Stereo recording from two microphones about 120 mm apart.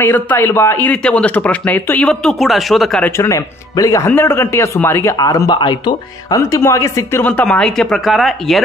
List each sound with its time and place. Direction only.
0.0 s speech: 15° left (ahead or behind); by 3.0 s centre (ahead or behind)
3.0 s a man's voice: 25° left (ahead or behind)
5.1 s speech: 30° left (ahead or behind)
5.6 s speech: 40° left (ahead or behind)
6.5 s speech: 25° left (ahead or behind); by 8.6 s centre (ahead or behind)